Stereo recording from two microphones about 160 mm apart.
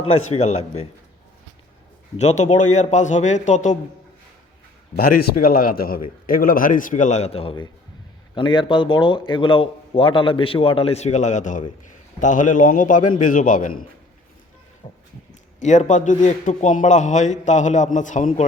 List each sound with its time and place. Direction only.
0.1 s a man's voice: 45° left (ahead or behind)
2.1 s a man's voice: 45° left (ahead or behind)
4.9 s a man's voice: 65° left (ahead or behind)
14.8 s music: 35° left (ahead or behind)
15.6 s a man's voice: 50° left (ahead or behind)